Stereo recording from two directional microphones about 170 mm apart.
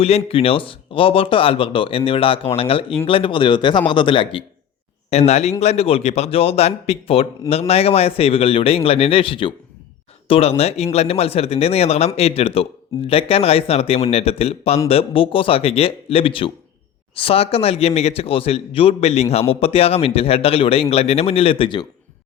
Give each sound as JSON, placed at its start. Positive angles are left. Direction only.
{"t": 0.0, "sound": "speech", "side_deg": 35}